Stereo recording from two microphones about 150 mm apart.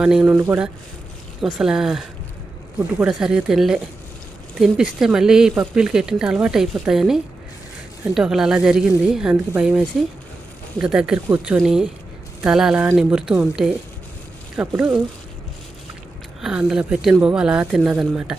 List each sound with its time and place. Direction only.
0.0 s speech: 5° right (ahead or behind)
0.3 s speech: 15° right (ahead or behind)
1.5 s speech: 5° right (ahead or behind)
16.4 s speech: 5° right (ahead or behind)